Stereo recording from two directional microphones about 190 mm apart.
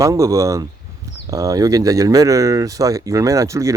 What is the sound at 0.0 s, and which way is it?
Speech, 15° right (ahead or behind).